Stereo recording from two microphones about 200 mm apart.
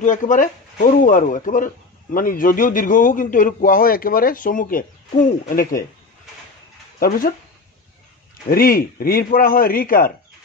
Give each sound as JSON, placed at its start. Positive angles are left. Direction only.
{"t": 0.0, "sound": "a man's voice", "side_deg": 40}
{"t": 7.0, "sound": "a man's voice", "side_deg": 45}
{"t": 8.5, "sound": "a man's voice", "side_deg": 45}